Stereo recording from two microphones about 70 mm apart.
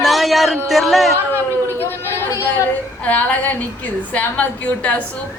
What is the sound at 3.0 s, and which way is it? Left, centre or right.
A woman's voice, left.